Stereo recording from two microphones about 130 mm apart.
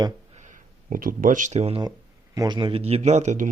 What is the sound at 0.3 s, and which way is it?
Speech, 75° right (ahead or behind).